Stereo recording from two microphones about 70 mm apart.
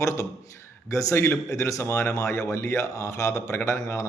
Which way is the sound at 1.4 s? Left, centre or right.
Left.